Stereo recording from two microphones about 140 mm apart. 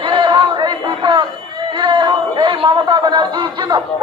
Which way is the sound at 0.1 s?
35° right (ahead or behind).